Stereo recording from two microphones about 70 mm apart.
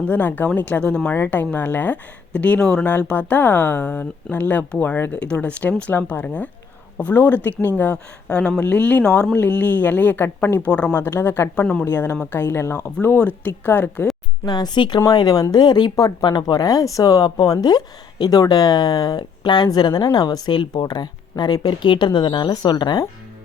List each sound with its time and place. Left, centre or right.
0.0 s speech: left
1.1 s speech: left
10.7 s speech: centre
10.9 s speech: left
11.9 s speech: left
14.4 s speech: left
15.1 s speech: left
15.5 s speech: left